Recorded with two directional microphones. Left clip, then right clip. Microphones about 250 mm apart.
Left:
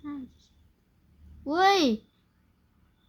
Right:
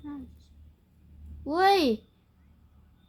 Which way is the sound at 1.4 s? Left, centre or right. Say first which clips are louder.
Even; left.